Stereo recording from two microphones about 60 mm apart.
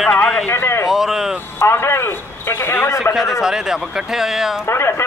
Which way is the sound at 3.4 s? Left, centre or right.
Centre.